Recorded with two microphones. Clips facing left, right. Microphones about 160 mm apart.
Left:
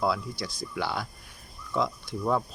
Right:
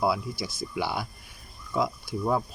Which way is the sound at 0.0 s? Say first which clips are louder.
Right 1 dB; 5° right (ahead or behind).